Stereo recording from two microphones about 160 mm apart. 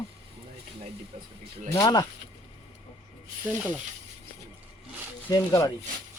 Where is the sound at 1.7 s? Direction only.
25° left (ahead or behind).